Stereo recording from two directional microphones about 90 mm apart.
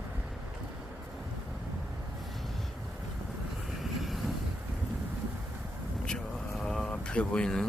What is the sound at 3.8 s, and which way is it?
Vehicle, centre (ahead or behind).